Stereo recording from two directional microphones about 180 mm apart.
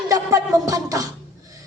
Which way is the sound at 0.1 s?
20° right (ahead or behind).